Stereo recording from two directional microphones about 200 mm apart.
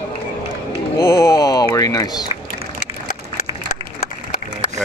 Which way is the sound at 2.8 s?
40° left (ahead or behind).